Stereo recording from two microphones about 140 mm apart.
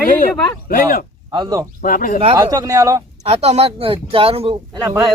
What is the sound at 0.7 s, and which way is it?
Speech, 80° left.